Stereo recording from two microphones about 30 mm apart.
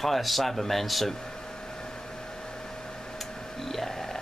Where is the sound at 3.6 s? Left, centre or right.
Centre.